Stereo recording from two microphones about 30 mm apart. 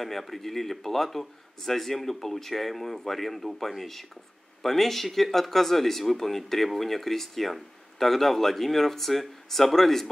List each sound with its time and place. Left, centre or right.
0.0 s speech: centre